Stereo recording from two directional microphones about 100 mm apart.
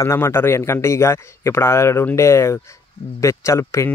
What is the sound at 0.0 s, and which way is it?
Speech, 25° left (ahead or behind).